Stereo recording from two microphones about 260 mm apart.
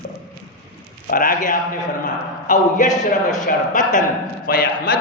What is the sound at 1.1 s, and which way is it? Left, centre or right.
A man's voice, left.